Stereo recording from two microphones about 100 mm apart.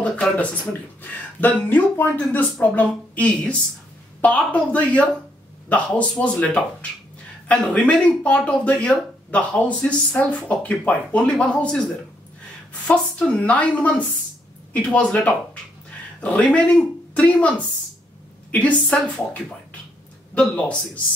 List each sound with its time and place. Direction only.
0.0 s a sound: 10° left (ahead or behind)
1.4 s speech: 20° left (ahead or behind)
13.4 s speech: 15° left (ahead or behind)